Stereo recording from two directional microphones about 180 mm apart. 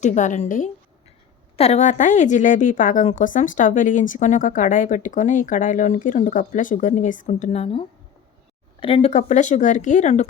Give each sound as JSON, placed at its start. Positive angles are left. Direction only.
{"t": 0.0, "sound": "a woman's voice", "side_deg": 40}